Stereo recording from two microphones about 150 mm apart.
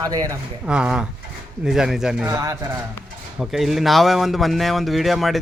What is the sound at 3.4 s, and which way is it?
Speech, centre (ahead or behind).